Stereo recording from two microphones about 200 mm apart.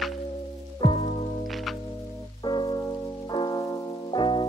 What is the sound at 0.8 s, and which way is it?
Music, 25° left (ahead or behind).